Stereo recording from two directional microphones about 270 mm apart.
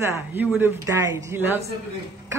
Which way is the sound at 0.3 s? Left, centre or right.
Centre.